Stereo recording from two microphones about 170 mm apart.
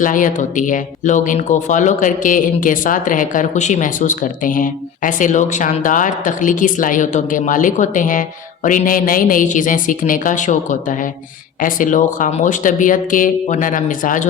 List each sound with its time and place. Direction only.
0.0 s speech: 50° left (ahead or behind)